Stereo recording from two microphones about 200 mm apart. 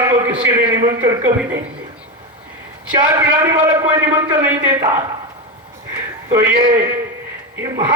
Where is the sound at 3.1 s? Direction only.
20° right (ahead or behind).